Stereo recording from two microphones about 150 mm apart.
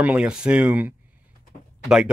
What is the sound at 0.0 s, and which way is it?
Speech, 10° right (ahead or behind).